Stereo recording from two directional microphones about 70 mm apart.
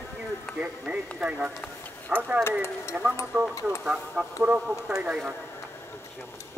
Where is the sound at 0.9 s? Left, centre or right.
Centre.